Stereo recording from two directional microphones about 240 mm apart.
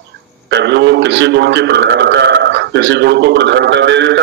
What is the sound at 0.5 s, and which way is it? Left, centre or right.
A man's voice, right.